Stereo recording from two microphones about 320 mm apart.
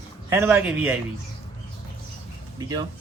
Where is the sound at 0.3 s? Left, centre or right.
Centre.